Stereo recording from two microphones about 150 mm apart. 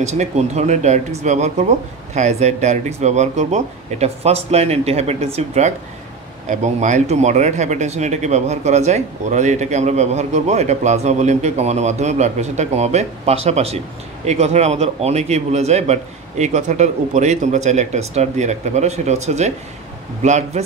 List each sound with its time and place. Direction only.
0.0 s speech: 50° right (ahead or behind)